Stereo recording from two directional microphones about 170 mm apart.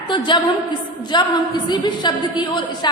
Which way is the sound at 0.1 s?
30° left (ahead or behind).